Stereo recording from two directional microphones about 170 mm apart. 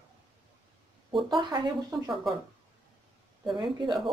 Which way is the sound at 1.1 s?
30° right (ahead or behind).